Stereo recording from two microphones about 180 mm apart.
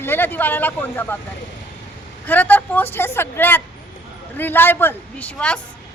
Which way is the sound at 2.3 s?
10° left (ahead or behind).